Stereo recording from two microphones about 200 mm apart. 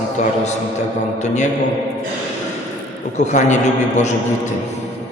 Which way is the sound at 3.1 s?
35° left (ahead or behind).